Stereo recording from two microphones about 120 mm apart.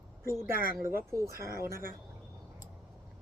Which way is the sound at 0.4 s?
20° right (ahead or behind).